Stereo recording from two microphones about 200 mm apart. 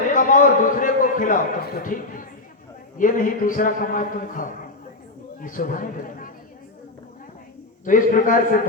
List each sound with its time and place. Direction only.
0.1 s a man's voice: 40° left (ahead or behind)
7.9 s a man's voice: 40° left (ahead or behind)